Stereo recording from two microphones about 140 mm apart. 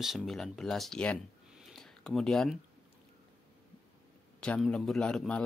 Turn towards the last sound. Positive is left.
turn(degrees=5)  # may be behind; listen again after turning